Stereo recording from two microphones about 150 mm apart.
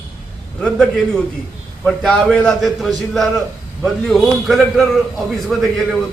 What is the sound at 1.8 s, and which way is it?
A man's voice, centre (ahead or behind).